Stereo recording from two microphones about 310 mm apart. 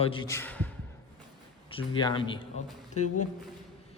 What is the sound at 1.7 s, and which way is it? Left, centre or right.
Speech, centre.